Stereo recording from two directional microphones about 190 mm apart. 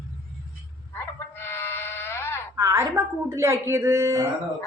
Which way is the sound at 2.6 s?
15° right (ahead or behind).